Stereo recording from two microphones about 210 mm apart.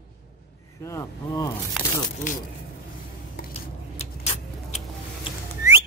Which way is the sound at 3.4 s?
50° left (ahead or behind).